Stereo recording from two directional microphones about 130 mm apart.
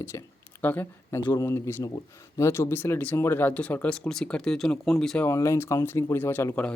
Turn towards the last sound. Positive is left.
turn(degrees=15)  # may be behind; listen again after turning